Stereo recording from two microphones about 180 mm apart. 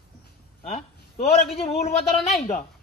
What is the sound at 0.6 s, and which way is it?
A man's voice, 40° left (ahead or behind).